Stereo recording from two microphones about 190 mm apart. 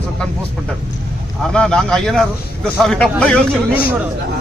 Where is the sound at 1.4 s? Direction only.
5° left (ahead or behind).